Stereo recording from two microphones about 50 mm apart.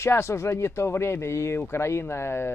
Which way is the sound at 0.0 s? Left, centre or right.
Left.